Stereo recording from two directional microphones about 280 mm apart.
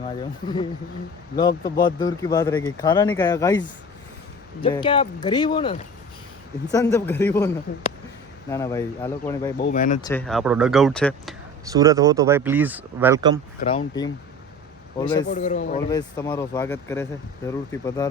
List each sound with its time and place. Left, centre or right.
0.2 s speech: centre
6.9 s speech: centre
9.6 s speech: left
10.0 s speech: centre
11.7 s speech: centre
13.6 s speech: centre
15.3 s speech: left
15.9 s speech: centre